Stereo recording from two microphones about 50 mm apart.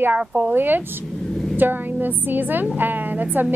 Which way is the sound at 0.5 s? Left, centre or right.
Right.